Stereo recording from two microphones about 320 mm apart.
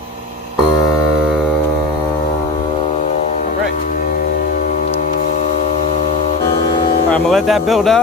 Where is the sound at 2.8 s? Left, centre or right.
Left.